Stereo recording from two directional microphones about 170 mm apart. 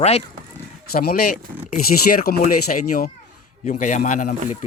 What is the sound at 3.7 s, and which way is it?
Speech, 45° left (ahead or behind).